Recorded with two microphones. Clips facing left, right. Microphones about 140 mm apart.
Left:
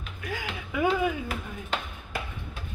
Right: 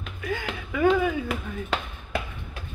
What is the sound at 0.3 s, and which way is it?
Speech, 10° left (ahead or behind).